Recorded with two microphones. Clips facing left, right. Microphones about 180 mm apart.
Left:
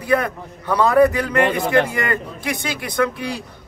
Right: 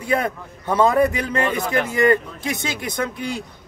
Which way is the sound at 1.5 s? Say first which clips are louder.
Left 4 dB; 25° left (ahead or behind).